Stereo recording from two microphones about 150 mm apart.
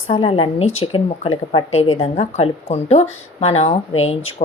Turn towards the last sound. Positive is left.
turn(degrees=45)  # may be behind; listen again after turning